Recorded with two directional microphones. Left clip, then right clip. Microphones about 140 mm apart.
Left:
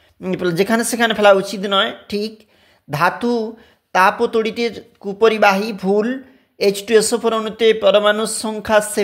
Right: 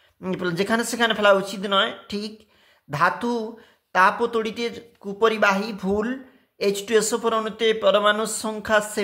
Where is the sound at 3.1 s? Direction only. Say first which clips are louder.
Left 7 dB; 20° left (ahead or behind).